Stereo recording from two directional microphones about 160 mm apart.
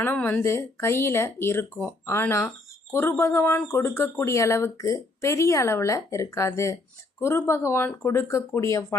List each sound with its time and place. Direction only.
0.0 s speech: 10° left (ahead or behind)